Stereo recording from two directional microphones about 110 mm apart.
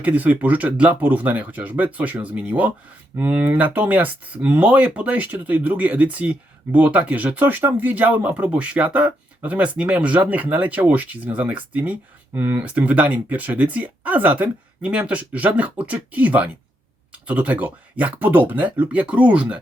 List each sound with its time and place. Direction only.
0.0 s speech: 15° right (ahead or behind)